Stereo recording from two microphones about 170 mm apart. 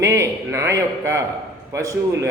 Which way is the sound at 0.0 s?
15° right (ahead or behind).